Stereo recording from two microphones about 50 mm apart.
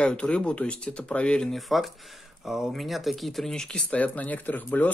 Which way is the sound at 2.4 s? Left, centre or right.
Centre.